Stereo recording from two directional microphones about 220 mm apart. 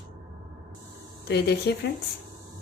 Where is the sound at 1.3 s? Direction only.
50° left (ahead or behind).